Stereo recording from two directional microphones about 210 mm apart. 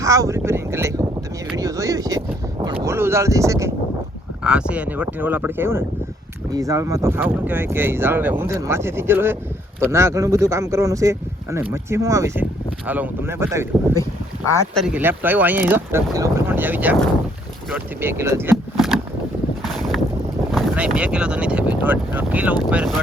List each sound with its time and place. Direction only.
0.0 s boat: 15° right (ahead or behind)
1.5 s vehicle: 15° right (ahead or behind)
2.6 s a sound: 15° right (ahead or behind)
4.4 s speech: 5° right (ahead or behind)
18.5 s a sound: centre (ahead or behind)
19.6 s boat: centre (ahead or behind)
20.5 s speech: centre (ahead or behind)